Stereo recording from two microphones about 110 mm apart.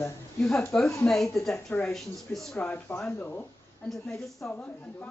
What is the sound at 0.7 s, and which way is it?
Speech, 5° left (ahead or behind).